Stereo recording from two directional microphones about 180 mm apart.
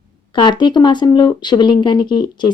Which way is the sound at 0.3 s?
25° left (ahead or behind).